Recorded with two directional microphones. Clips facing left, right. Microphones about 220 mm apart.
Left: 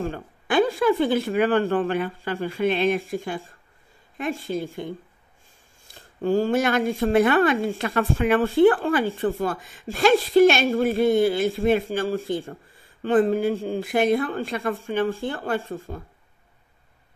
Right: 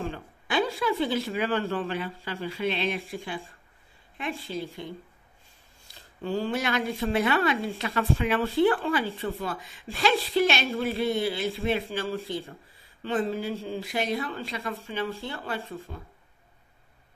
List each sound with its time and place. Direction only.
0.0 s speech: 50° left (ahead or behind)
5.9 s speech: 45° left (ahead or behind)